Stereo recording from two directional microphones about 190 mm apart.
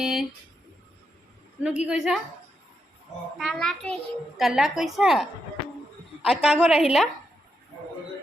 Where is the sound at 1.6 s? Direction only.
5° right (ahead or behind).